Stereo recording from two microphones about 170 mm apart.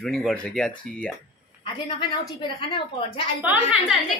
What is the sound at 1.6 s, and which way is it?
A woman's voice, 30° left (ahead or behind).